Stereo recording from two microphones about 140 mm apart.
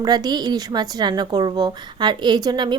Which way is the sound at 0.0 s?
30° right (ahead or behind).